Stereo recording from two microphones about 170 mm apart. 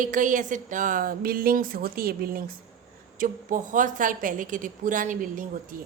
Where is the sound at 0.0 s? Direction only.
50° right (ahead or behind).